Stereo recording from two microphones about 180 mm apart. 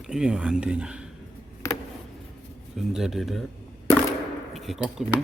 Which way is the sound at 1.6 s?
15° left (ahead or behind).